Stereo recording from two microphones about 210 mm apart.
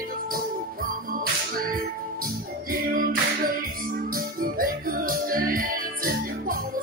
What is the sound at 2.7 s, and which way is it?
Music, 40° right (ahead or behind).